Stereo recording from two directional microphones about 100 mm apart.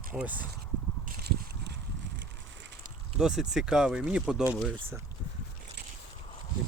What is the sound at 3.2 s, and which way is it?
Speech, 5° right (ahead or behind).